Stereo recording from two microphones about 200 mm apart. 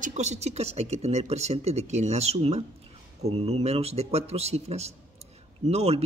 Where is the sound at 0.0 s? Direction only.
35° right (ahead or behind).